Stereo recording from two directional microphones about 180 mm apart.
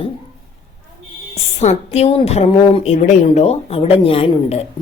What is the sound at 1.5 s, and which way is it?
A woman's voice, 35° left (ahead or behind).